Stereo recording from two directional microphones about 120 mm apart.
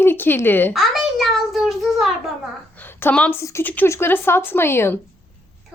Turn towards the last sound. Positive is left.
turn(degrees=20)  # may be behind; listen again after turning